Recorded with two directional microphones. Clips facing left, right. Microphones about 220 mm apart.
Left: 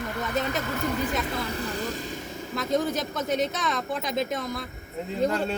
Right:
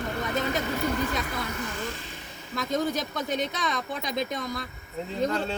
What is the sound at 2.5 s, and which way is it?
Speech, centre (ahead or behind).